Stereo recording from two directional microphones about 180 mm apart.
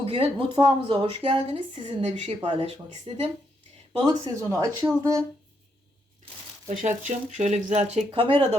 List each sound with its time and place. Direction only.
0.0 s speech: 30° right (ahead or behind)
6.7 s speech: 40° right (ahead or behind)